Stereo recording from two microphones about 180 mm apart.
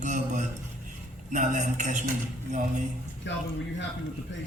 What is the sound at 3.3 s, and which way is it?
Speech, 90° left.